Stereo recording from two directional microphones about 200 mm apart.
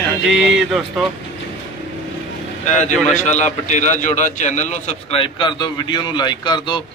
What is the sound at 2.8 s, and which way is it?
A man's voice, 35° left (ahead or behind).